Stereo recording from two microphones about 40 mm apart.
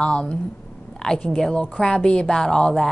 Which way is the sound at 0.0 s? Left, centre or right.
Left.